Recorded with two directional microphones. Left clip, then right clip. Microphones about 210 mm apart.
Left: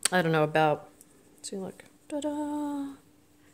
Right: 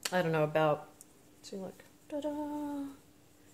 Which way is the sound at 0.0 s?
45° left (ahead or behind).